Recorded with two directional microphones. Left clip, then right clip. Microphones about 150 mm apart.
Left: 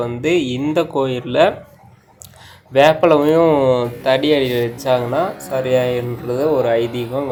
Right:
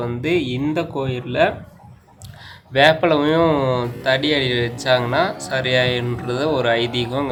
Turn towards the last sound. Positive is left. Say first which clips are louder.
# left 2 dB
turn(degrees=10)  # may be behind; listen again after turning